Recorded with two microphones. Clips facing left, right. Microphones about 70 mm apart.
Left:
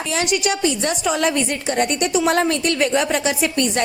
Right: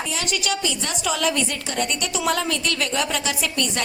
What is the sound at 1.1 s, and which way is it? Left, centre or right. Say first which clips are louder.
A woman's voice: left 1 dB; left.